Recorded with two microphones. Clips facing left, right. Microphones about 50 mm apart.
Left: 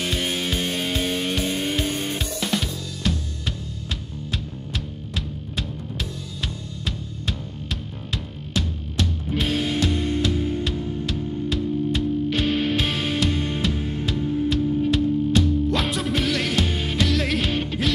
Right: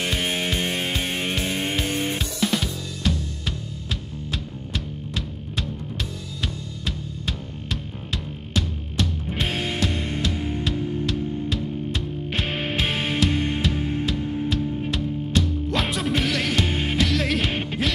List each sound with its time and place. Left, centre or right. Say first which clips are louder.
0.2 s music: even; right
2.1 s music: right 1 dB; centre
9.5 s music: left 4 dB; right
11.1 s music: even; centre
12.4 s music: left 3 dB; right
14.9 s music: left 6 dB; centre
16.6 s music: right 1 dB; right
17.0 s music: left 1 dB; centre
17.5 s music: left 2 dB; right